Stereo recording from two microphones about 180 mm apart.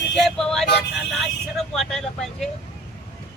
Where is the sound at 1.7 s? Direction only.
Centre (ahead or behind).